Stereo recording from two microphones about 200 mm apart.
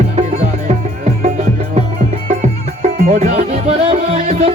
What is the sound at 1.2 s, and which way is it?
Music, 40° right (ahead or behind).